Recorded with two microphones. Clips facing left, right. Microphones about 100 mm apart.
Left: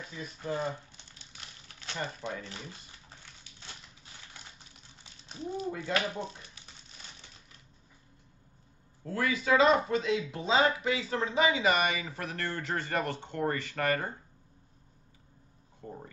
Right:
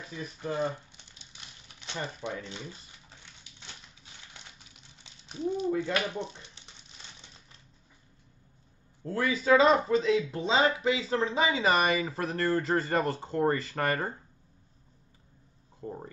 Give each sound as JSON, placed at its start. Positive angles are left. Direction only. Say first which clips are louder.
{"t": 0.2, "sound": "speech", "louder": "right 1 dB", "side_deg": -20}
{"t": 1.7, "sound": "speech", "louder": "even", "side_deg": -20}
{"t": 5.0, "sound": "speech", "louder": "right 7 dB", "side_deg": -20}
{"t": 9.0, "sound": "speech", "louder": "right 2 dB", "side_deg": -30}